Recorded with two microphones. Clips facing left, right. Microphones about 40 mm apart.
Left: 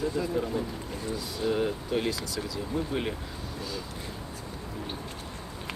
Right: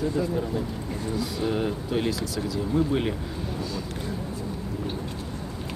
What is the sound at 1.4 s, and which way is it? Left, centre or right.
Speech, centre.